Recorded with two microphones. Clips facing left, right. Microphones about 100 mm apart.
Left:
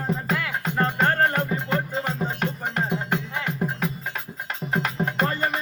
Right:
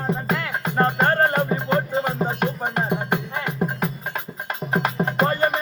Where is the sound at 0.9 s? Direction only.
15° right (ahead or behind).